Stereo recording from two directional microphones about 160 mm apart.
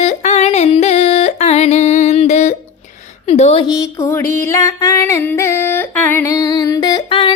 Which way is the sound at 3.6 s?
20° left (ahead or behind).